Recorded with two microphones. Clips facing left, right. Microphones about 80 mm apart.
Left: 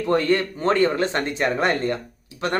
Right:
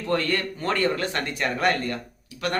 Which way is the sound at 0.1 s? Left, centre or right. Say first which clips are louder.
Left 5 dB; left.